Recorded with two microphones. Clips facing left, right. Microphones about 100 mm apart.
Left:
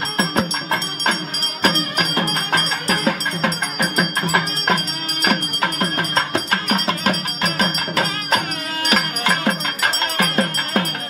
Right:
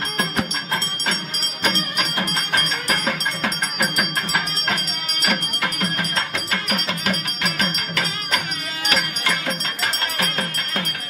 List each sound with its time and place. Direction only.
6.3 s music: 40° left (ahead or behind)
8.9 s music: 55° left (ahead or behind)